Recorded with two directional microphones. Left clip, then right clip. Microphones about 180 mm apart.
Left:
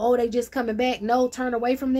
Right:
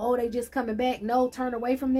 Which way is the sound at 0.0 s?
40° left (ahead or behind).